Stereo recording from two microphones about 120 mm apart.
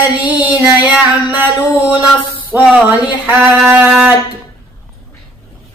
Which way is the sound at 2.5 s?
10° right (ahead or behind).